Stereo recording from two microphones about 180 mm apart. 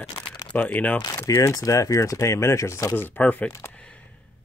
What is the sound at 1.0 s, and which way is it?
Speech, 20° left (ahead or behind).